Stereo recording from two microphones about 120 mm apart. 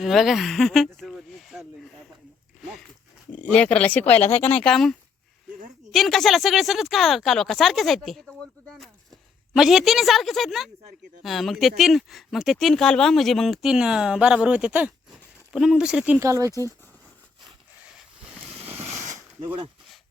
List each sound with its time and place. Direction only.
0.0 s speech: centre (ahead or behind)
3.3 s a woman's voice: 10° left (ahead or behind); by 16.2 s 10° right (ahead or behind)
16.2 s speech: 25° right (ahead or behind)
18.8 s a sound: 70° right (ahead or behind)